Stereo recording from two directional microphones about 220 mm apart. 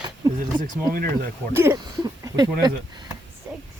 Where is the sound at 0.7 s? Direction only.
40° right (ahead or behind).